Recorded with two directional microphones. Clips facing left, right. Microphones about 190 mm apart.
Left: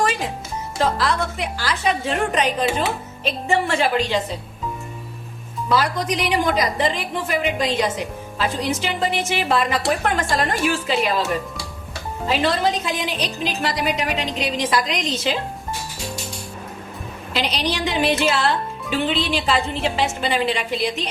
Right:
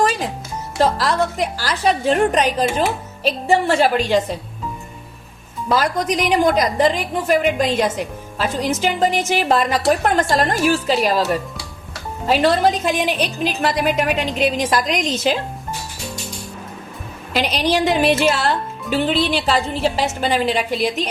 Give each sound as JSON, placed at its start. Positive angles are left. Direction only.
{"t": 0.8, "sound": "a woman's voice", "side_deg": -40}
{"t": 5.6, "sound": "a woman's voice", "side_deg": -45}
{"t": 12.4, "sound": "a woman's voice", "side_deg": -50}
{"t": 17.3, "sound": "a woman's voice", "side_deg": -45}